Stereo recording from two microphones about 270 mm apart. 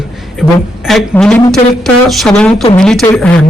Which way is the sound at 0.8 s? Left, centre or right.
Centre.